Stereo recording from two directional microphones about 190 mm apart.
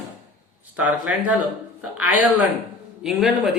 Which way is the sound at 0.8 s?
5° right (ahead or behind).